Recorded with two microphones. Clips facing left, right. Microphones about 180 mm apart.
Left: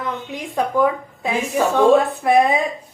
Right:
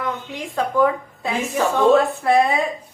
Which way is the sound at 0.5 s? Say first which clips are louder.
Even; 15° left (ahead or behind).